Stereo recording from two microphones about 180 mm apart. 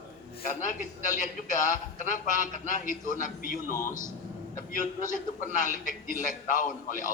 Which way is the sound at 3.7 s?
15° left (ahead or behind).